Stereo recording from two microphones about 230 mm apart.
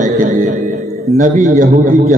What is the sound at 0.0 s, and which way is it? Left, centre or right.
Music, right.